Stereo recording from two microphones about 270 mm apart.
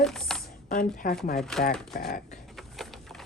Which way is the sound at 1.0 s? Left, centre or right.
Left.